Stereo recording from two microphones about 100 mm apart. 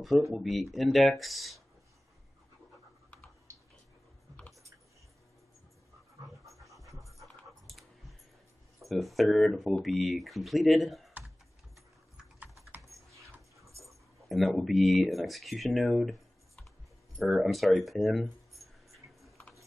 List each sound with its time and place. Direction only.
0.3 s speech: centre (ahead or behind)
6.5 s pant: centre (ahead or behind)
6.8 s pant: 35° right (ahead or behind)
7.2 s dog: centre (ahead or behind)
8.7 s speech: centre (ahead or behind)
13.1 s dog: 30° right (ahead or behind)
13.8 s speech: centre (ahead or behind)